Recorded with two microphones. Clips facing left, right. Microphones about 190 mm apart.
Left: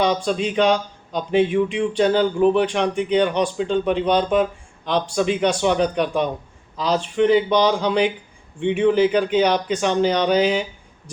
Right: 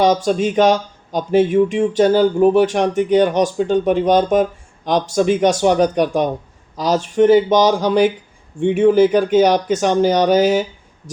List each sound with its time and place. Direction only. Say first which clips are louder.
0.0 s speech: right 5 dB; 45° right (ahead or behind)